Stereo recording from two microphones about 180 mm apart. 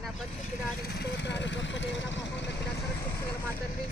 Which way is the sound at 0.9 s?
70° left (ahead or behind).